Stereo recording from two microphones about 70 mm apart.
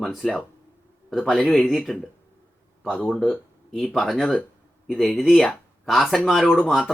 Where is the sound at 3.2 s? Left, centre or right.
Centre.